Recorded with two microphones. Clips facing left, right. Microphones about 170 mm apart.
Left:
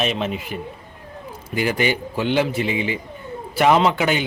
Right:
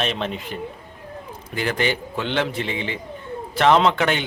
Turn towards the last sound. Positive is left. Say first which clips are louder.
# even
turn(degrees=5)  # may be behind; listen again after turning